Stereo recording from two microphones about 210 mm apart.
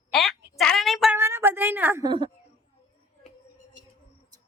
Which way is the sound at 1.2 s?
10° right (ahead or behind).